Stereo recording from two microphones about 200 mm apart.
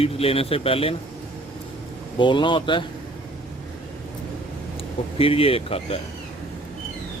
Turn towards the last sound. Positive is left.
turn(degrees=30)  # may be behind; listen again after turning